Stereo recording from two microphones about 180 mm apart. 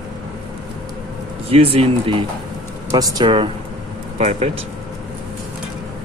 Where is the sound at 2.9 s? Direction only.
20° right (ahead or behind).